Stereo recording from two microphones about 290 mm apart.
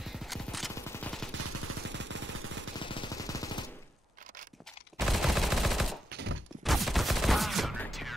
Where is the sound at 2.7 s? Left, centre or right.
Centre.